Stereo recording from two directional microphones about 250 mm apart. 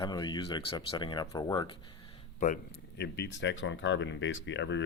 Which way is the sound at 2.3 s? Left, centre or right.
Left.